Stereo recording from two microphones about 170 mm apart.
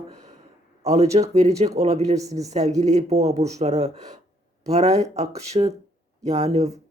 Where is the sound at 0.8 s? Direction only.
40° right (ahead or behind).